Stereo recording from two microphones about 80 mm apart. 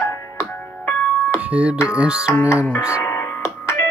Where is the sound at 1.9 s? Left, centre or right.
Centre.